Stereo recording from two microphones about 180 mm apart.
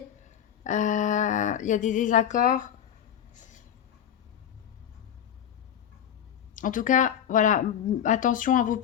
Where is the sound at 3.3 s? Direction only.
45° left (ahead or behind).